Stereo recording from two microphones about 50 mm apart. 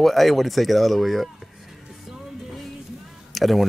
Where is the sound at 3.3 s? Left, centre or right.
Centre.